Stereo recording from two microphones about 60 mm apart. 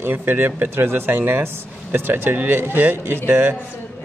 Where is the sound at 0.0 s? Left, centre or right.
Right.